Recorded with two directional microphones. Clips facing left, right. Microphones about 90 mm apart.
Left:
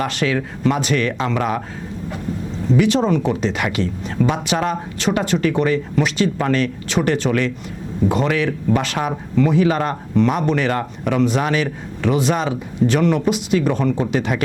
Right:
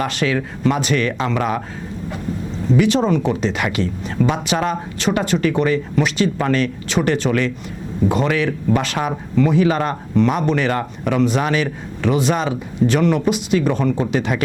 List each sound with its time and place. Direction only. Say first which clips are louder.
0.0 s speech: even; 15° right (ahead or behind)
2.7 s speech: even; 15° right (ahead or behind)